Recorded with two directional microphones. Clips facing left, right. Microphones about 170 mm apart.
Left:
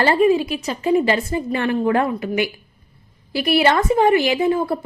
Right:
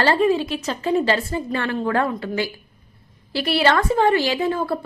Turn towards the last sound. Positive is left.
turn(degrees=15)  # may be behind; listen again after turning